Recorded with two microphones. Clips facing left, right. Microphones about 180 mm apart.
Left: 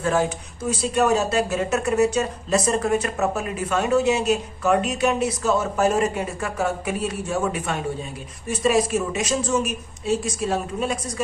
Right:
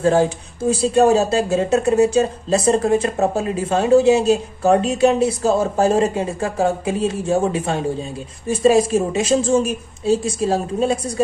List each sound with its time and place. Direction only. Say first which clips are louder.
0.0 s a woman's voice: right 6 dB; 30° right (ahead or behind)